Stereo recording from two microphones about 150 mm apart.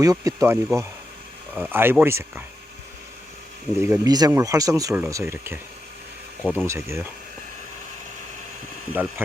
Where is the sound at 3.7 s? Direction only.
15° right (ahead or behind).